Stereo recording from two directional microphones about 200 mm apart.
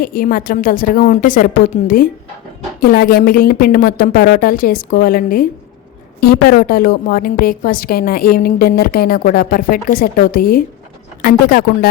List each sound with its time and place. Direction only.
0.0 s a woman's voice: 45° left (ahead or behind)